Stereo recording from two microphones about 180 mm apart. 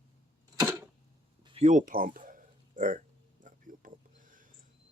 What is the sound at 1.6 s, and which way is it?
Speech, 45° right (ahead or behind).